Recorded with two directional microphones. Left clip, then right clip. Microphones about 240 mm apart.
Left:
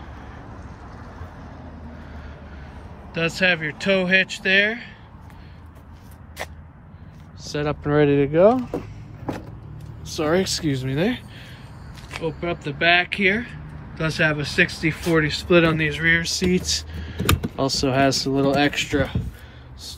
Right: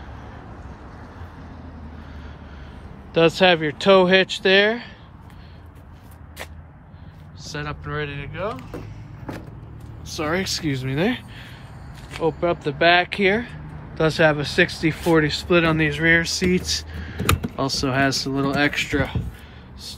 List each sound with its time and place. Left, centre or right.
3.1 s speech: centre
7.4 s speech: centre
7.8 s speech: centre
10.0 s speech: centre